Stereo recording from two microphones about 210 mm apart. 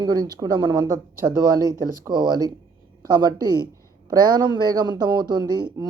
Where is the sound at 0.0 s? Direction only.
20° right (ahead or behind).